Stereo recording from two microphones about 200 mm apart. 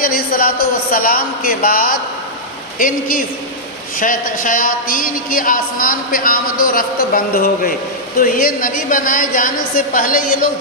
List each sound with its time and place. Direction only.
0.0 s a woman's voice: 45° left (ahead or behind)